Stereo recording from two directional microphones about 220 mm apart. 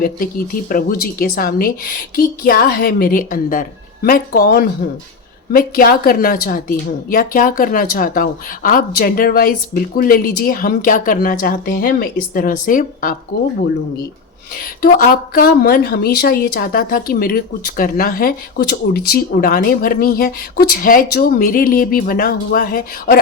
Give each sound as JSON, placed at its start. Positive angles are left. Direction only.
{"t": 0.7, "sound": "a woman's voice", "side_deg": 40}
{"t": 14.5, "sound": "a woman's voice", "side_deg": 40}